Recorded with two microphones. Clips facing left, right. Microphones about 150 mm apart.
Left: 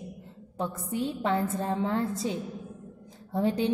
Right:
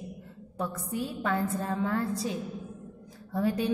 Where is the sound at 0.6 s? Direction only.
25° left (ahead or behind).